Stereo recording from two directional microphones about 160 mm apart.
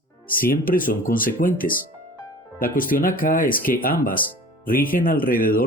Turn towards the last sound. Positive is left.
turn(degrees=60)  # may be behind; listen again after turning